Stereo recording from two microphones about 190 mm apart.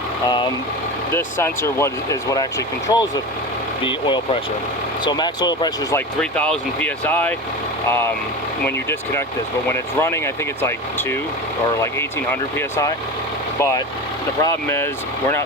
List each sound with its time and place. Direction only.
1.1 s speech: 15° left (ahead or behind)
6.1 s speech: 5° left (ahead or behind)
14.4 s speech: 15° left (ahead or behind)